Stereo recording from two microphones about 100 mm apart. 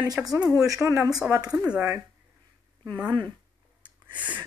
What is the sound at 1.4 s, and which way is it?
Speech, 35° right (ahead or behind).